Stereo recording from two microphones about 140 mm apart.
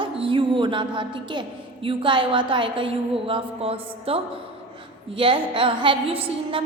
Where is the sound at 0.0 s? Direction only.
40° right (ahead or behind).